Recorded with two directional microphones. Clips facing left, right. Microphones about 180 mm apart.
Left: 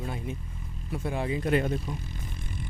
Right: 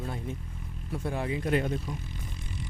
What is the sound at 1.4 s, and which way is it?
Speech, 65° left (ahead or behind).